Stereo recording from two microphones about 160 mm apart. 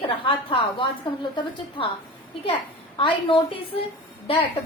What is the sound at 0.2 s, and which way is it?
Speech, 35° left (ahead or behind).